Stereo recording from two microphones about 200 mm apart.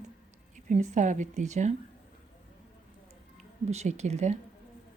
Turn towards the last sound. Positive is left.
turn(degrees=-35)  # may be behind; listen again after turning